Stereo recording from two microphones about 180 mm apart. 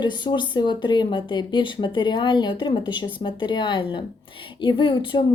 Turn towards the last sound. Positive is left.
turn(degrees=25)  # may be behind; listen again after turning